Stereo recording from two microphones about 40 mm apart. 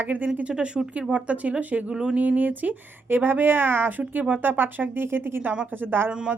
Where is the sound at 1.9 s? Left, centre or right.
Right.